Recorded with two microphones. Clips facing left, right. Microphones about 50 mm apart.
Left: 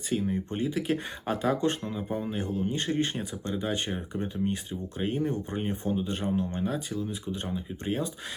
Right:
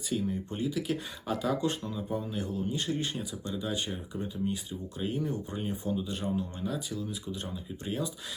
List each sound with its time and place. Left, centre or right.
0.1 s speech: left